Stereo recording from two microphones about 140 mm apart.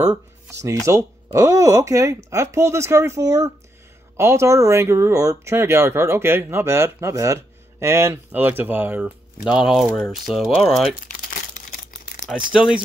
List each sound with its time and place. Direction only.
0.0 s a sound: 25° right (ahead or behind)
0.8 s speech: 20° right (ahead or behind); by 11.0 s centre (ahead or behind)
11.1 s crumpling: 80° left
12.5 s speech: 5° right (ahead or behind)